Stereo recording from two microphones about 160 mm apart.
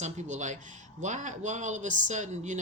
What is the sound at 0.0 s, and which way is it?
Speech, 50° right (ahead or behind).